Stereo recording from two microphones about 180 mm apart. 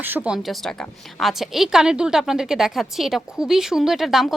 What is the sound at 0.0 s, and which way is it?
Speech, 10° right (ahead or behind).